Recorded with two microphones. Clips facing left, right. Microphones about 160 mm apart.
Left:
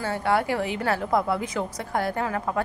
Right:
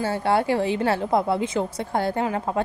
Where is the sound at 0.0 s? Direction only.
30° right (ahead or behind).